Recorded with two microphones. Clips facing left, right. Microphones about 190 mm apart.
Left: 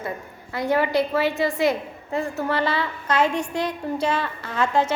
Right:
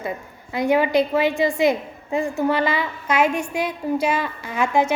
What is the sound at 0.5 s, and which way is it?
A woman's voice, 15° right (ahead or behind).